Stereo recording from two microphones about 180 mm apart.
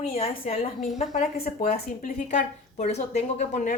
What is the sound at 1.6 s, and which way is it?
A woman's voice, 50° left (ahead or behind).